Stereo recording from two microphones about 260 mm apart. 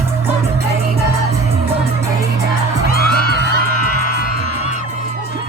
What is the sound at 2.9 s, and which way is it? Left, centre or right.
Music, left.